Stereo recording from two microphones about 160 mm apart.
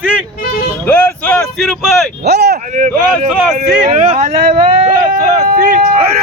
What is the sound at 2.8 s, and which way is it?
Speech, 55° right (ahead or behind).